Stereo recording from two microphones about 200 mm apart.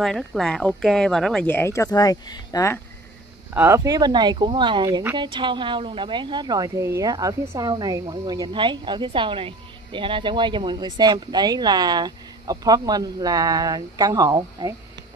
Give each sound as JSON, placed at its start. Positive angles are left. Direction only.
{"t": 0.0, "sound": "speech", "side_deg": 0}
{"t": 3.5, "sound": "speech", "side_deg": -10}